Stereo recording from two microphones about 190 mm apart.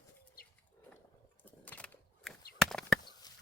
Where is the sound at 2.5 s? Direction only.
5° left (ahead or behind).